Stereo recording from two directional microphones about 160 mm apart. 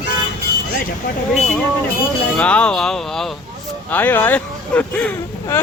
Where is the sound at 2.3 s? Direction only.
5° left (ahead or behind).